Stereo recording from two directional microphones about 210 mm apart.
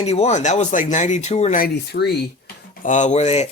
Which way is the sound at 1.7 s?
50° left (ahead or behind).